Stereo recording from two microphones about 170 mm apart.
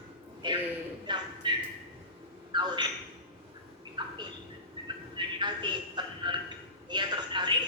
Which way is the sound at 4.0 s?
30° right (ahead or behind).